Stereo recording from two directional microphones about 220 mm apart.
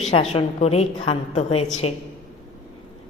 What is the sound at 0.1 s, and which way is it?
A woman's voice, 30° left (ahead or behind).